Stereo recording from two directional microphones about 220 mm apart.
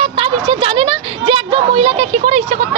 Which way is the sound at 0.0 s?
25° right (ahead or behind).